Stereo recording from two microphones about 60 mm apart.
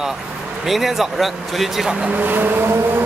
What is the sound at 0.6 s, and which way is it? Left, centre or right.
Speech, centre.